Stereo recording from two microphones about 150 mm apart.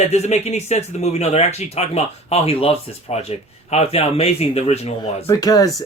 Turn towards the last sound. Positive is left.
turn(degrees=25)  # may be behind; listen again after turning